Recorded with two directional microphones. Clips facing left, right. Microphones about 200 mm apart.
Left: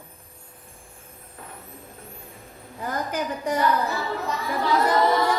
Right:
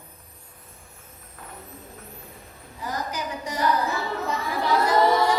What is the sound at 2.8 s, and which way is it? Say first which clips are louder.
Speech: left 3 dB; 55° left (ahead or behind).